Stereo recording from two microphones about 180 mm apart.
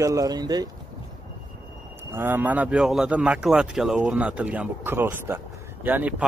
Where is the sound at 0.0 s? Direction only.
20° right (ahead or behind).